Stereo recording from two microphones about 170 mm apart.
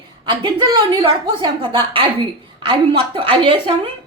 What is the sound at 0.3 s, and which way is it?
A woman's voice, 25° right (ahead or behind).